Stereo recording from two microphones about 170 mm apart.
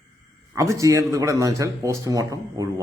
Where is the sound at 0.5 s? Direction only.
20° right (ahead or behind).